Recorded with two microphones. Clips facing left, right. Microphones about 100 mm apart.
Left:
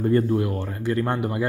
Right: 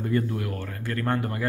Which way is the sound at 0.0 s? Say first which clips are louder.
Left 6 dB; 35° left (ahead or behind).